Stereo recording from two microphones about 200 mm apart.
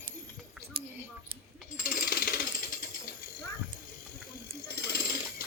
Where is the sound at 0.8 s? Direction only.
25° right (ahead or behind).